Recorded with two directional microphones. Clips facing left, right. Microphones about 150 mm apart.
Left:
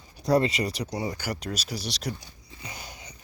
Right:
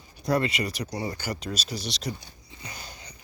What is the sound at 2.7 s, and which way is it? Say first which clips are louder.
Wheeze: left 1 dB; 20° left (ahead or behind).